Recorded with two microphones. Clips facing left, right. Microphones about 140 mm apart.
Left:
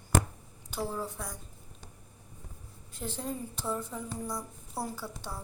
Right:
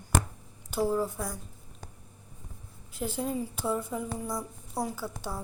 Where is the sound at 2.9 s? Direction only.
10° right (ahead or behind).